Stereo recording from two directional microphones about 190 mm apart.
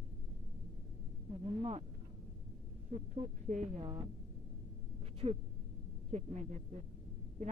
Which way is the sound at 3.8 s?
25° right (ahead or behind).